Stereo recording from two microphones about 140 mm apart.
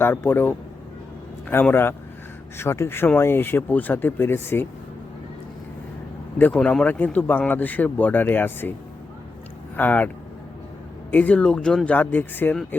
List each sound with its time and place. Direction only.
0.0 s speech: 15° left (ahead or behind)
6.4 s speech: 5° left (ahead or behind)
9.7 s speech: 10° left (ahead or behind)
11.1 s speech: 10° left (ahead or behind)